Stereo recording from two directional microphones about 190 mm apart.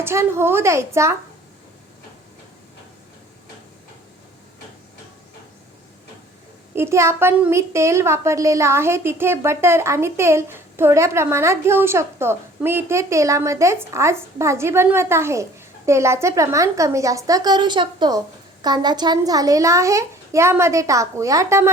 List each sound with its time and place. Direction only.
0.0 s a woman's voice: 15° right (ahead or behind)
6.7 s a woman's voice: 15° right (ahead or behind)